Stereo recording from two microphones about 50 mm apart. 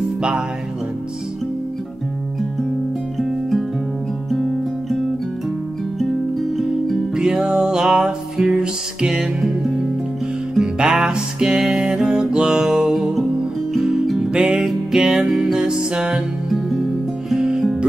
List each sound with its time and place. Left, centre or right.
3.2 s music: centre
4.3 s guitar: centre
7.2 s music: centre
10.6 s music: centre
14.0 s music: centre
14.3 s music: centre
16.5 s music: centre